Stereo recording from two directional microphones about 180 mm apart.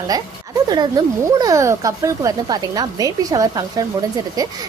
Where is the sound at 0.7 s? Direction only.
25° right (ahead or behind).